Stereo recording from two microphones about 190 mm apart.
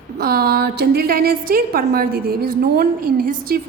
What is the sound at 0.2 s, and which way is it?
A woman's voice, 55° right (ahead or behind).